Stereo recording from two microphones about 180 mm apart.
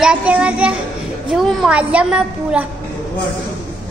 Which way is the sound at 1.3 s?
Centre (ahead or behind).